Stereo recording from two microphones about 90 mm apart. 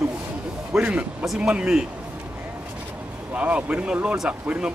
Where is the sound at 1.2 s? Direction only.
Centre (ahead or behind).